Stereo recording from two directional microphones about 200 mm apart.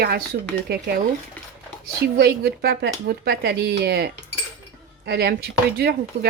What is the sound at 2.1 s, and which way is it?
Speech, 50° right (ahead or behind).